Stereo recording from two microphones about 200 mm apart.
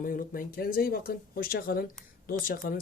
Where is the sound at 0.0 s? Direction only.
45° left (ahead or behind).